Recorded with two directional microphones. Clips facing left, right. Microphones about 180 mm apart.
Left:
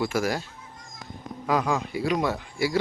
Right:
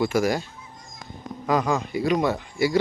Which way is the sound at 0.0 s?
5° left (ahead or behind).